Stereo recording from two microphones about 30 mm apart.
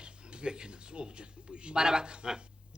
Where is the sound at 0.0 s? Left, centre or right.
Right.